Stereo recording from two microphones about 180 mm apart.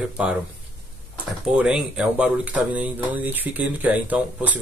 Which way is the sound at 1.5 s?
5° right (ahead or behind).